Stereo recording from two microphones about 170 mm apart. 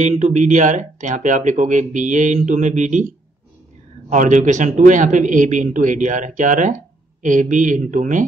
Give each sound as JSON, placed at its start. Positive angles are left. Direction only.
{"t": 0.0, "sound": "a man's voice", "side_deg": -45}
{"t": 4.1, "sound": "a man's voice", "side_deg": -45}